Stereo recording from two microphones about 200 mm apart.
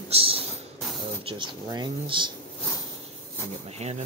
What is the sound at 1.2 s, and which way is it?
Speech, 25° right (ahead or behind).